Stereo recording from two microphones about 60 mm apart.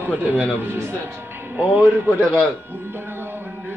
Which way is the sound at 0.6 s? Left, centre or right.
Right.